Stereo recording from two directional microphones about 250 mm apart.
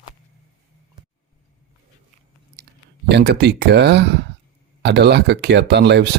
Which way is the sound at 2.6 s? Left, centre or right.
Right.